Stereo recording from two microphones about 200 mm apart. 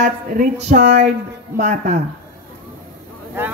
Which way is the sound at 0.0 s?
35° right (ahead or behind).